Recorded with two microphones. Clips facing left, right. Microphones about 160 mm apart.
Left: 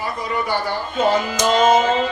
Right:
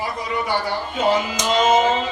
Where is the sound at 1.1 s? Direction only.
45° left (ahead or behind).